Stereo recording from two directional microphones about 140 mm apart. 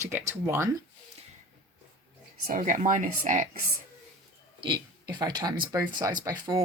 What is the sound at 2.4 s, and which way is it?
Speech, 70° right (ahead or behind).